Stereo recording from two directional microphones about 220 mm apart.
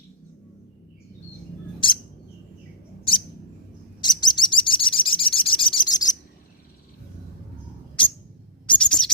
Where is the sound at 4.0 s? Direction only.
20° left (ahead or behind).